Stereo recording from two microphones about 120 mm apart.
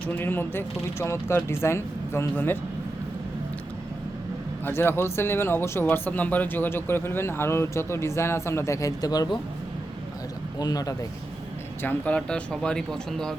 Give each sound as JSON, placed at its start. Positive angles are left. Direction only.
{"t": 0.0, "sound": "speech", "side_deg": 15}
{"t": 4.6, "sound": "speech", "side_deg": 20}
{"t": 10.6, "sound": "speech", "side_deg": 35}
{"t": 11.8, "sound": "speech", "side_deg": 15}